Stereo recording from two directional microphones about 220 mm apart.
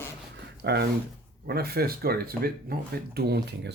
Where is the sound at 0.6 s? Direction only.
50° right (ahead or behind).